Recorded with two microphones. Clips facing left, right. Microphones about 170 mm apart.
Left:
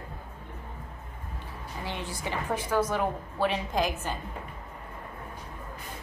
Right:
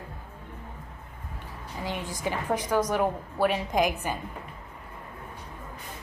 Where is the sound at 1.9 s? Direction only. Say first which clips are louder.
Right 3 dB; 15° right (ahead or behind).